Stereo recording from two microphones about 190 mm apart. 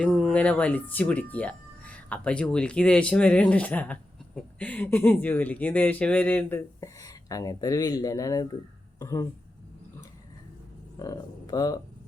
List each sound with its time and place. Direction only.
0.0 s speech: centre (ahead or behind)
11.0 s speech: 20° left (ahead or behind)